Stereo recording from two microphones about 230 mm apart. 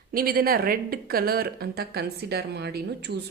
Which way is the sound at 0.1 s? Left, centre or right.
Right.